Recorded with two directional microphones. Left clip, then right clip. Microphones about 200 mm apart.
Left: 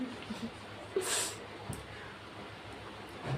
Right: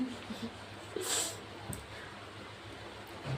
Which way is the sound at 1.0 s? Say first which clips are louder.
Left 4 dB; 15° left (ahead or behind).